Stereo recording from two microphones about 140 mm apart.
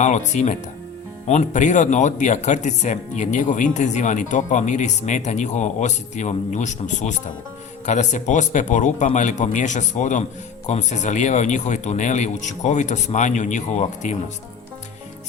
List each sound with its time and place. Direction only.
0.0 s speech: 55° left (ahead or behind)